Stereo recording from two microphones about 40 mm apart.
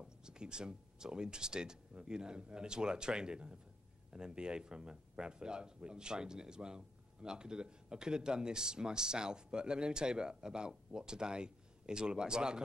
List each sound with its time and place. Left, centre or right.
0.2 s a man's voice: right